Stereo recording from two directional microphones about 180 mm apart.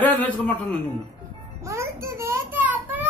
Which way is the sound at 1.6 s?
15° right (ahead or behind).